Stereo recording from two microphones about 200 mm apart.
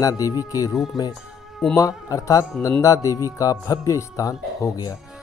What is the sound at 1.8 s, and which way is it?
Speech, 15° left (ahead or behind).